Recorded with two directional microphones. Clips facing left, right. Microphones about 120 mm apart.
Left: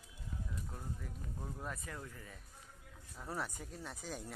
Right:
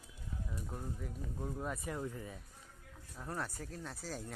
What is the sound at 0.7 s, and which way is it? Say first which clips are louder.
Speech: right 4 dB; 5° right (ahead or behind).